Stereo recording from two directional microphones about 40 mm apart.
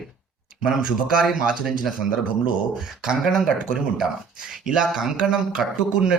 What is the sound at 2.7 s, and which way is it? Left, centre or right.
Speech, centre.